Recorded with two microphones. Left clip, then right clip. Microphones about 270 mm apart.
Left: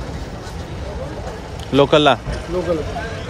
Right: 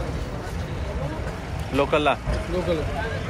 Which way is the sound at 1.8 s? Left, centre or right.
Left.